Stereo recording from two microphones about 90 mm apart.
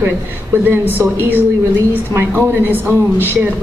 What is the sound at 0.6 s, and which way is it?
A woman's voice, 20° right (ahead or behind).